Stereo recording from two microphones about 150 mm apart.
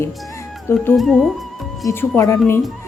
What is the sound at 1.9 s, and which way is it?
Speech, 15° left (ahead or behind).